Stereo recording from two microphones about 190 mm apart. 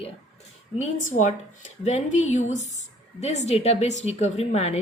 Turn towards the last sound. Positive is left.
turn(degrees=35)  # may be behind; listen again after turning